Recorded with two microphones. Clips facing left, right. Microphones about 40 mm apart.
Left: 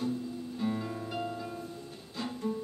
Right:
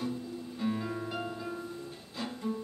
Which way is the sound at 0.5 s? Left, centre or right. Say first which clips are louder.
Right 1 dB; centre.